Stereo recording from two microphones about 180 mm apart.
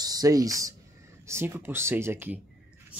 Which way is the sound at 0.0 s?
20° right (ahead or behind).